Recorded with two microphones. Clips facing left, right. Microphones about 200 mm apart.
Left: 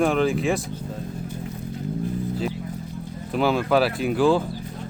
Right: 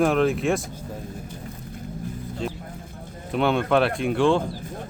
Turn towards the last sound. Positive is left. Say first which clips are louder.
# left 1 dB
turn(degrees=5)  # may be behind; listen again after turning